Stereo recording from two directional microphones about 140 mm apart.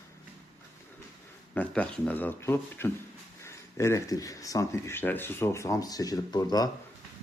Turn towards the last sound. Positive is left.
turn(degrees=30)  # may be behind; listen again after turning